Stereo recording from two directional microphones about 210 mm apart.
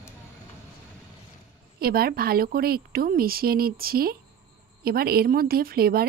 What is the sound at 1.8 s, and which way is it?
A woman's voice, 45° right (ahead or behind).